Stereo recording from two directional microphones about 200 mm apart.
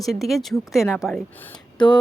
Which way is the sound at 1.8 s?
20° left (ahead or behind).